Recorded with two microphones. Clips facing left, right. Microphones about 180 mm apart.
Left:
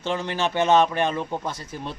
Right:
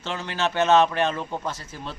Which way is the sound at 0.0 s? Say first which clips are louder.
Left 2 dB; 15° left (ahead or behind).